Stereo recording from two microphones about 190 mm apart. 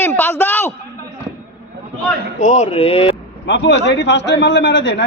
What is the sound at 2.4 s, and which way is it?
Speech, 40° left (ahead or behind).